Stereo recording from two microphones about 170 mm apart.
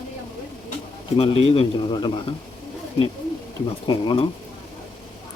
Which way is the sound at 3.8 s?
30° left (ahead or behind).